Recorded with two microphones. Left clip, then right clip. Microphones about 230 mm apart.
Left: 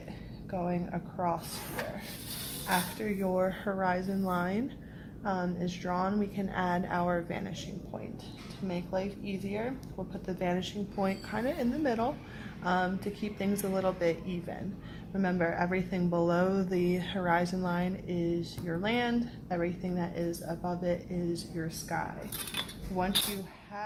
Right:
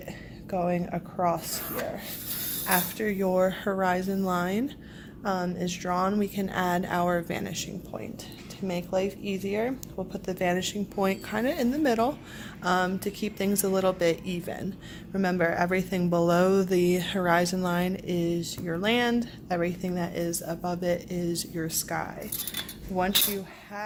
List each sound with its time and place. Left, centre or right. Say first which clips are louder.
0.5 s speech: right 7 dB; right
2.6 s speech: right 4 dB; right